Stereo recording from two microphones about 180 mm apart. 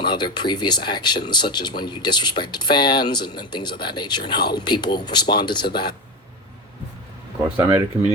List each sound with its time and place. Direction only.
0.0 s speech: 25° left (ahead or behind)
7.5 s speech: 10° right (ahead or behind)